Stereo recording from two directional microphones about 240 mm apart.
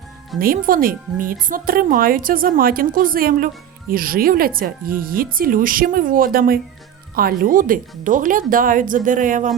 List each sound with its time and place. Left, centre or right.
0.3 s speech: right